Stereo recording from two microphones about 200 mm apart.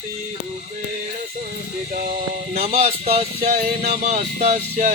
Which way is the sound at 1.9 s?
45° right (ahead or behind).